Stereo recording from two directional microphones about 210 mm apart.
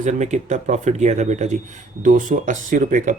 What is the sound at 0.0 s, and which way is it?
Speech, 35° right (ahead or behind).